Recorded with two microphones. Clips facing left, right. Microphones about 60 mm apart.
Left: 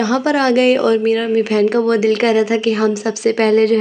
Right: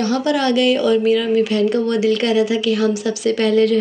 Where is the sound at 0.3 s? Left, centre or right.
Left.